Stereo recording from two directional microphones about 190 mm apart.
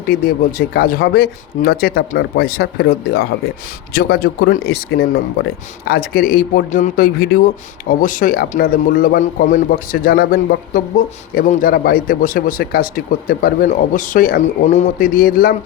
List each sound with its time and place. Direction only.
0.1 s a man's voice: 50° left (ahead or behind)